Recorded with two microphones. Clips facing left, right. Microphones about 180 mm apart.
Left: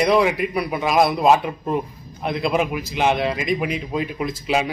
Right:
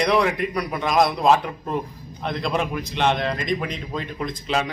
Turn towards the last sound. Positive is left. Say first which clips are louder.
# left 3 dB
turn(degrees=5)  # may be behind; listen again after turning